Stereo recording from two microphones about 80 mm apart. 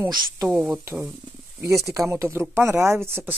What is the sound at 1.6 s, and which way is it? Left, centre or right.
Speech, right.